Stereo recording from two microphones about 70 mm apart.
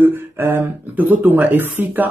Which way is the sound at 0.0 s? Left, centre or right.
Right.